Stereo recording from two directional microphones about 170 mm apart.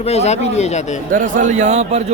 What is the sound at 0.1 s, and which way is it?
Speech, 40° left (ahead or behind).